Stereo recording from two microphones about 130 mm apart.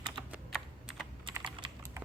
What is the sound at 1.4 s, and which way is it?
Typing, 35° right (ahead or behind).